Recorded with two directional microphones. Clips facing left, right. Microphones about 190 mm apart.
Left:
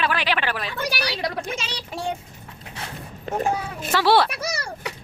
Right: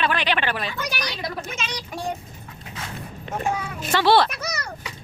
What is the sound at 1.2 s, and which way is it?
Speech, 75° left (ahead or behind).